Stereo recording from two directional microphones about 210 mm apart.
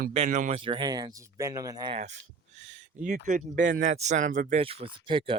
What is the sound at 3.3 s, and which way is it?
Speech, 35° right (ahead or behind).